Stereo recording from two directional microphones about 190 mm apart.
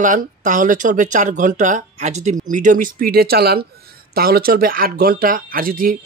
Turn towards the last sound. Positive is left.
turn(degrees=-50)  # may be behind; listen again after turning